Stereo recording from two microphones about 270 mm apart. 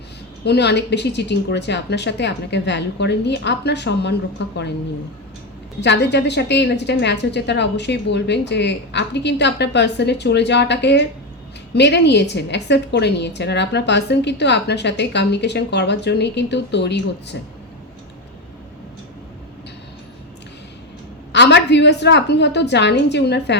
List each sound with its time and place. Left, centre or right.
0.4 s a woman's voice: left
5.8 s a woman's voice: left
21.3 s a woman's voice: left